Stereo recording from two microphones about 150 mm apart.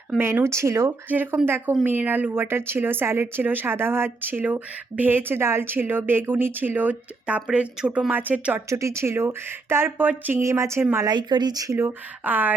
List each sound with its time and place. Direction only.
0.2 s a woman's voice: 15° right (ahead or behind)
11.1 s speech: 30° right (ahead or behind); by 12.5 s 10° right (ahead or behind)